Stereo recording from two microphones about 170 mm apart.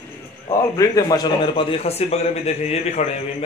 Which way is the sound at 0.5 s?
20° left (ahead or behind).